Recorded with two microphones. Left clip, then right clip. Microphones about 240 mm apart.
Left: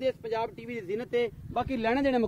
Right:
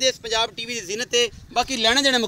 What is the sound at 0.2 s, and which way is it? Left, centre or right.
Speech, right.